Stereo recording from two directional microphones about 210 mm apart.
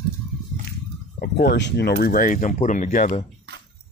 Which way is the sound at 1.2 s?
50° left (ahead or behind).